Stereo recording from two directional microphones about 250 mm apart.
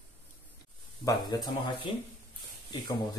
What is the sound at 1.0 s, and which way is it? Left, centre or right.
Speech, centre.